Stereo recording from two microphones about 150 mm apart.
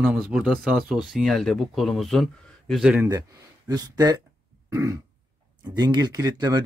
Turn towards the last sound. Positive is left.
turn(degrees=-25)  # may be behind; listen again after turning